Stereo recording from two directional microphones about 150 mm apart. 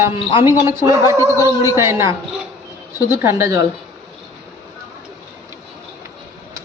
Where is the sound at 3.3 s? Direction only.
20° right (ahead or behind).